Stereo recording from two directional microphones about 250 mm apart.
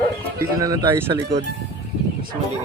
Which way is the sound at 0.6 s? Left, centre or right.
Centre.